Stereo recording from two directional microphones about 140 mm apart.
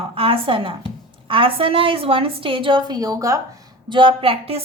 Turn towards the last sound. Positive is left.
turn(degrees=-40)  # may be behind; listen again after turning